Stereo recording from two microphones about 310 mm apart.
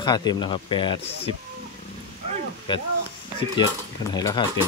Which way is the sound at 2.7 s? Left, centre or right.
Centre.